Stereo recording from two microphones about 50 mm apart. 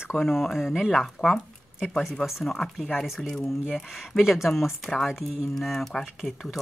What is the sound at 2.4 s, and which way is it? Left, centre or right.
Speech, centre.